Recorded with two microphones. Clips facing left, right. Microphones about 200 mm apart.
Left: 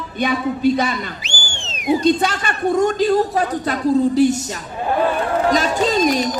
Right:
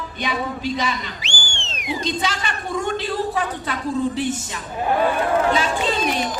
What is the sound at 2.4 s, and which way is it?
Speech, 60° left (ahead or behind).